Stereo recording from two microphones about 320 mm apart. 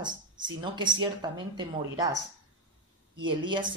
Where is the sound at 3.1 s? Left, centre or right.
Centre.